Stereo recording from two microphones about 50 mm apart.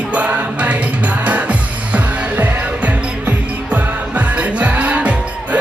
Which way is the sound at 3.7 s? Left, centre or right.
Right.